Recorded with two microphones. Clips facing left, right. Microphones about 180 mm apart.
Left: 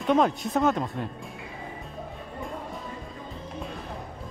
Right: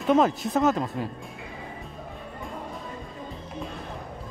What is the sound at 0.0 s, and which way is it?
A man's voice, centre (ahead or behind).